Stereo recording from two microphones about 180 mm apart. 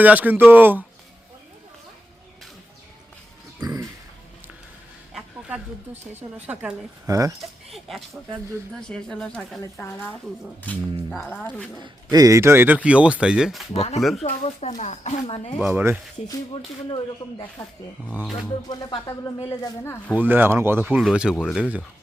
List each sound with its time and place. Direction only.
0.0 s speech: 10° right (ahead or behind)
3.6 s a sound: 20° right (ahead or behind)
5.1 s speech: 10° right (ahead or behind)
7.1 s speech: 20° right (ahead or behind)
7.7 s speech: centre (ahead or behind)
12.1 s speech: 20° right (ahead or behind)
13.7 s speech: 35° left (ahead or behind)
15.6 s speech: 10° right (ahead or behind)
18.2 s speech: centre (ahead or behind)
18.7 s music: 20° left (ahead or behind)
19.5 s speech: 15° left (ahead or behind)
20.1 s speech: 10° right (ahead or behind)